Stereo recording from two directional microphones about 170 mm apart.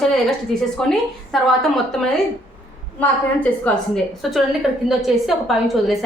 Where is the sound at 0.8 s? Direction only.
Centre (ahead or behind).